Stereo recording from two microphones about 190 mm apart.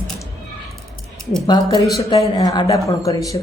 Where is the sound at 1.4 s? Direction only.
20° left (ahead or behind).